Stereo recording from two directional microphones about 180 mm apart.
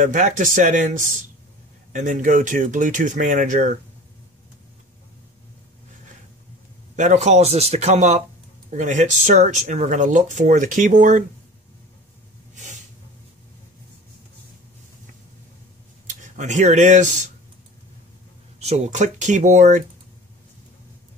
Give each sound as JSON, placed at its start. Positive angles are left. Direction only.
{"t": 0.0, "sound": "speech", "side_deg": -45}
{"t": 7.0, "sound": "speech", "side_deg": -40}
{"t": 16.1, "sound": "speech", "side_deg": -40}
{"t": 18.6, "sound": "speech", "side_deg": -40}